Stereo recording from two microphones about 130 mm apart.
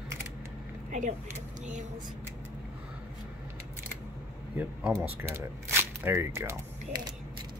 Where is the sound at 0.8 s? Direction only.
75° right (ahead or behind).